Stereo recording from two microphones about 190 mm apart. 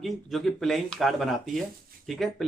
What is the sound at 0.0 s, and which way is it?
Speech, centre (ahead or behind).